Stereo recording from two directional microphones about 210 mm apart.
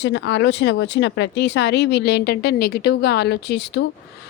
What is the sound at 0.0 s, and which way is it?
Speech, 55° left (ahead or behind).